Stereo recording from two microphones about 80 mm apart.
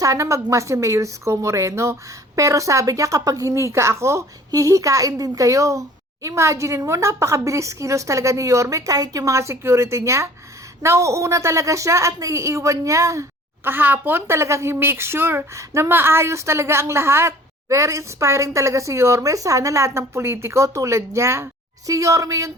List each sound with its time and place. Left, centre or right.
0.0 s a woman's voice: right
13.7 s a woman's voice: right